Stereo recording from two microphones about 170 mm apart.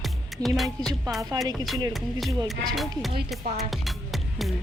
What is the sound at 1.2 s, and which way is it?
Speech, 20° right (ahead or behind).